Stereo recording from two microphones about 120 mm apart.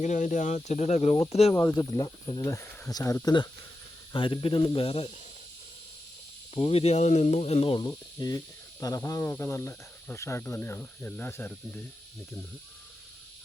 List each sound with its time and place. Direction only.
0.0 s speech: 90° left; by 1.5 s 60° left (ahead or behind)
1.5 s speech: 20° left (ahead or behind)
4.1 s speech: 45° left (ahead or behind)
6.5 s speech: 55° left (ahead or behind)
7.9 s snake: 30° left (ahead or behind)
8.8 s speech: 25° left (ahead or behind)